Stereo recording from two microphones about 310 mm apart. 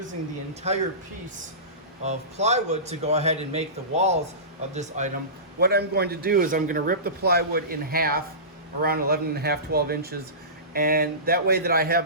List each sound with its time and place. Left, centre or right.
0.7 s a man's voice: right
2.0 s a man's voice: right